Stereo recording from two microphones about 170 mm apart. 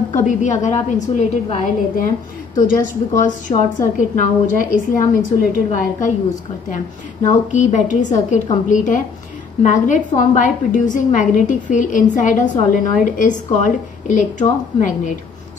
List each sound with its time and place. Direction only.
0.1 s a woman's voice: 45° left (ahead or behind)
7.2 s a woman's voice: 45° left (ahead or behind)